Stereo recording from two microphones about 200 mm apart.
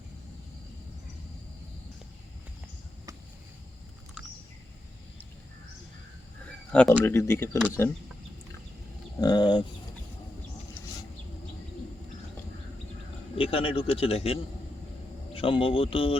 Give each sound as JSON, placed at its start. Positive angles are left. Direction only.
{"t": 6.7, "sound": "speech", "side_deg": 5}
{"t": 9.2, "sound": "speech", "side_deg": 20}
{"t": 13.3, "sound": "speech", "side_deg": 25}
{"t": 15.4, "sound": "speech", "side_deg": 25}